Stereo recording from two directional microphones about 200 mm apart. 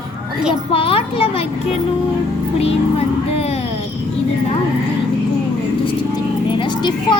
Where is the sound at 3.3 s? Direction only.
30° left (ahead or behind).